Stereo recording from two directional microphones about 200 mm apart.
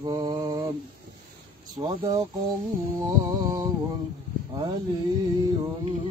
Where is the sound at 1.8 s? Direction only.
20° right (ahead or behind).